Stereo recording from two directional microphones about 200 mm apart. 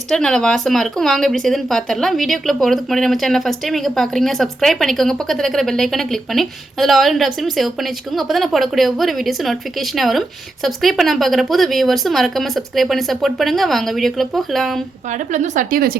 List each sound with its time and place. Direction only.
0.1 s speech: 5° left (ahead or behind)
15.3 s speech: 40° right (ahead or behind)